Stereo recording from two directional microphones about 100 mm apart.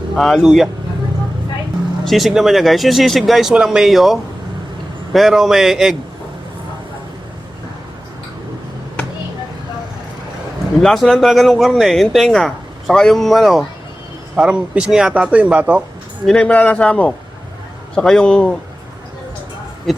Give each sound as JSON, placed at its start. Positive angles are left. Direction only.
{"t": 0.2, "sound": "speech", "side_deg": 0}
{"t": 2.0, "sound": "speech", "side_deg": 0}
{"t": 10.8, "sound": "speech", "side_deg": 0}
{"t": 16.2, "sound": "speech", "side_deg": 10}
{"t": 19.9, "sound": "speech", "side_deg": 0}